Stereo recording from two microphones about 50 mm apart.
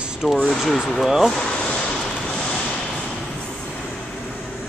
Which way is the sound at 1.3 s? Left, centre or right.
Centre.